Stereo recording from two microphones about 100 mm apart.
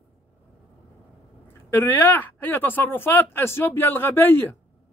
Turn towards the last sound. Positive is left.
turn(degrees=20)  # may be behind; listen again after turning